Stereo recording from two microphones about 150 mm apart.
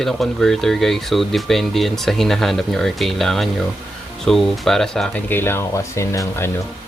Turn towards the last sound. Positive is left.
turn(degrees=20)  # may be behind; listen again after turning